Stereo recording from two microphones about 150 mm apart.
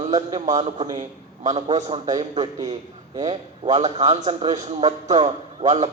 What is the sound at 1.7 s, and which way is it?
Speech, 25° right (ahead or behind).